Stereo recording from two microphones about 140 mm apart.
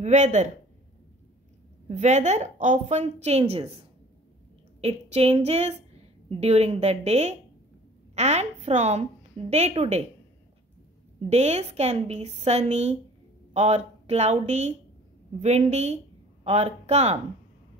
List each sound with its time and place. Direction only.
0.0 s a woman's voice: 60° right (ahead or behind)
1.9 s a woman's voice: 55° right (ahead or behind)
4.8 s a woman's voice: 50° right (ahead or behind)
11.1 s a woman's voice: 50° right (ahead or behind)